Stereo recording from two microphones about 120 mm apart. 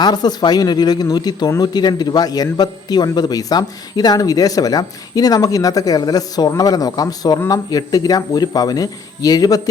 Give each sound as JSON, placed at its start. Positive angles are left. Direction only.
{"t": 0.0, "sound": "a man's voice", "side_deg": 35}